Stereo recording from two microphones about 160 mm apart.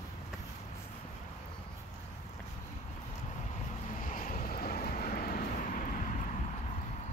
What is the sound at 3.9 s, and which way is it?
Vehicle, 60° left (ahead or behind).